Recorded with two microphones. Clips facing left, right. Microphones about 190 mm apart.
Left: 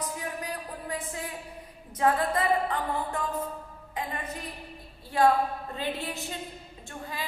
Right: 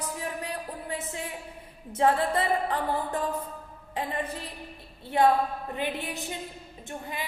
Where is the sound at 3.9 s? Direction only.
30° right (ahead or behind).